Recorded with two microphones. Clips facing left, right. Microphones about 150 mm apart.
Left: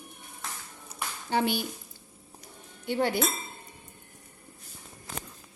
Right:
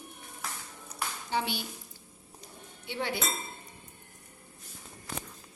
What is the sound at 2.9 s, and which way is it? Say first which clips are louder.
Speech: left 7 dB; 50° left (ahead or behind).